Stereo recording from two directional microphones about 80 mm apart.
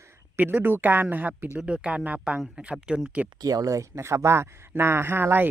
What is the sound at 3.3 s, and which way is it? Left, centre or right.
Speech, right.